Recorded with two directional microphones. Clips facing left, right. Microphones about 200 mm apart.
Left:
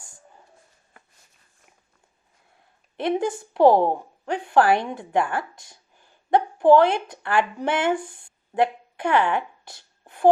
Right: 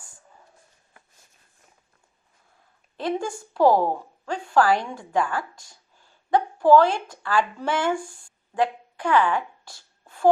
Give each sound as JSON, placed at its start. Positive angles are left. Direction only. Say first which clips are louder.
{"t": 3.0, "sound": "a woman's voice", "louder": "left 3 dB", "side_deg": 20}